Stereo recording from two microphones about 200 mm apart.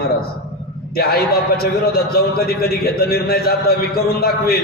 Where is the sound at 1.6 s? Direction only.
50° left (ahead or behind).